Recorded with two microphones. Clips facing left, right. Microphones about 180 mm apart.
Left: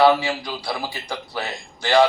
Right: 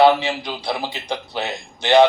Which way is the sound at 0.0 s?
20° right (ahead or behind).